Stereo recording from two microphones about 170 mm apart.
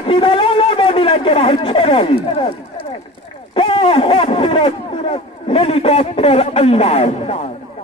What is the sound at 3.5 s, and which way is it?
Speech, 30° left (ahead or behind).